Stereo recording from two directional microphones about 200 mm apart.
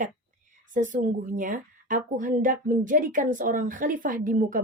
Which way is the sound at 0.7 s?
40° right (ahead or behind).